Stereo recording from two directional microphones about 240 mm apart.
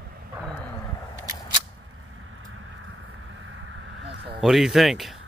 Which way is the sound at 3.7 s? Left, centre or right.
Right.